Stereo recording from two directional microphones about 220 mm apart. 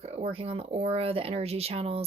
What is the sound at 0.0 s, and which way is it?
Speech, 30° right (ahead or behind).